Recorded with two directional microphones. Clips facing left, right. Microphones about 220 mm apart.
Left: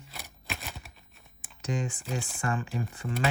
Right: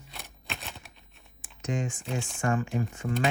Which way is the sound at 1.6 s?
35° left (ahead or behind).